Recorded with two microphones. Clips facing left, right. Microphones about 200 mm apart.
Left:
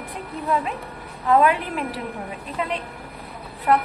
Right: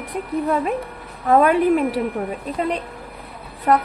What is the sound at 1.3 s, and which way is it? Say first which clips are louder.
Speech: right 4 dB; 40° right (ahead or behind).